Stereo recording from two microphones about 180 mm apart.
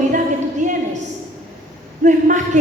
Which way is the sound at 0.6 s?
40° right (ahead or behind).